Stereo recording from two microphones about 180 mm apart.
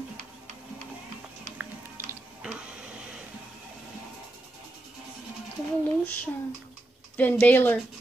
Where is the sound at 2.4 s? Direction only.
5° right (ahead or behind).